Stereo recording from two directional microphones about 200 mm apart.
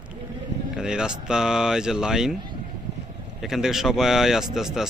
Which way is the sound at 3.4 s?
Centre (ahead or behind).